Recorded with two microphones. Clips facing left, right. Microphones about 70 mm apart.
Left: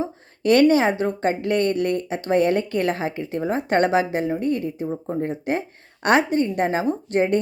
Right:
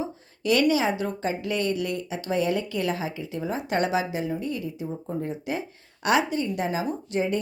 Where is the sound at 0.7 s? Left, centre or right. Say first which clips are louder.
Left 5 dB; left.